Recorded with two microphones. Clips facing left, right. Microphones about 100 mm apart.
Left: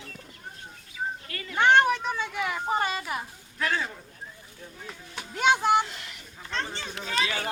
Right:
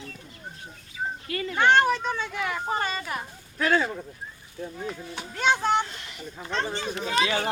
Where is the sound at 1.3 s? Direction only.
30° right (ahead or behind).